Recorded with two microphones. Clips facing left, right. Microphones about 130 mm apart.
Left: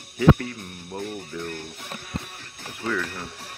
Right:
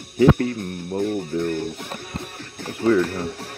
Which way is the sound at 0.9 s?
25° right (ahead or behind).